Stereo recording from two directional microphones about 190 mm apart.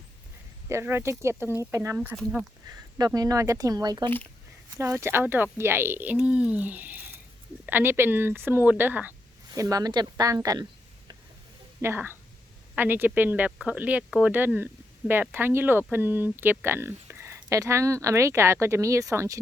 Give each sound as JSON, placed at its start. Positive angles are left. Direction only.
{"t": 0.7, "sound": "speech", "side_deg": -15}
{"t": 2.0, "sound": "speech", "side_deg": -5}
{"t": 2.6, "sound": "speech", "side_deg": -20}
{"t": 11.8, "sound": "speech", "side_deg": -10}